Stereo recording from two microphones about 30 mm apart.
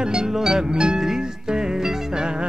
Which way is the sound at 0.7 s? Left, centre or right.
Right.